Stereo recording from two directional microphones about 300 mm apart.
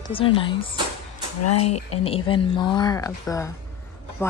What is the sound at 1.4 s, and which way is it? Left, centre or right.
Speech, left.